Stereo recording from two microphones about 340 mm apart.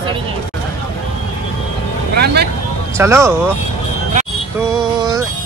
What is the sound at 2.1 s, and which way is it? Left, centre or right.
Speech, right.